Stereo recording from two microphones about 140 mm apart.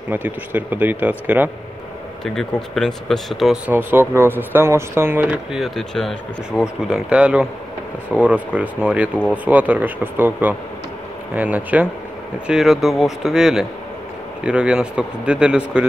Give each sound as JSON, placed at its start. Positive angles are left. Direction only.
{"t": 0.1, "sound": "speech", "side_deg": -15}
{"t": 2.2, "sound": "speech", "side_deg": 5}
{"t": 3.7, "sound": "speech", "side_deg": -15}
{"t": 5.6, "sound": "speech", "side_deg": 0}